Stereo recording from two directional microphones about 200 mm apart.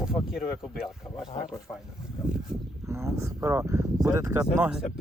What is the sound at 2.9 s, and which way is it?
Speech, 15° right (ahead or behind).